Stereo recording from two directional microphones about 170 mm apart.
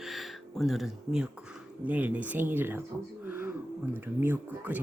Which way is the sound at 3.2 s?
10° right (ahead or behind).